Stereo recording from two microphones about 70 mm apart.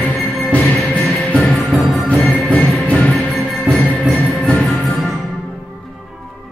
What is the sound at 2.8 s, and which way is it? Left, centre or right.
Music, centre.